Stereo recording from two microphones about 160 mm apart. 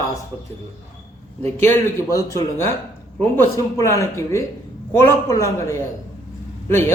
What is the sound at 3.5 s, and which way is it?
A man's voice, 20° left (ahead or behind).